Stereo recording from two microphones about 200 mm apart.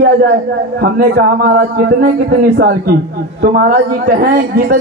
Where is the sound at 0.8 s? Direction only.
50° right (ahead or behind).